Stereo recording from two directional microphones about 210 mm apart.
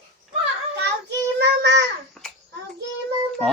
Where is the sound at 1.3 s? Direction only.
55° right (ahead or behind).